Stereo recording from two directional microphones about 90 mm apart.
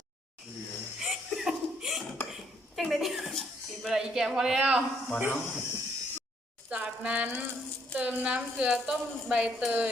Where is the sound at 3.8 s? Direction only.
5° right (ahead or behind).